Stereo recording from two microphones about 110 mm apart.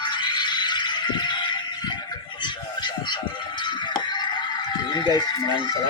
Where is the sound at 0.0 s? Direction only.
45° left (ahead or behind).